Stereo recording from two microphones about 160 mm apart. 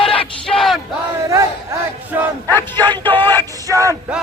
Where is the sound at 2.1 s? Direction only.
15° right (ahead or behind).